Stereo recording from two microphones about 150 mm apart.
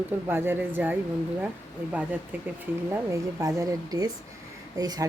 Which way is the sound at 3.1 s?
20° right (ahead or behind).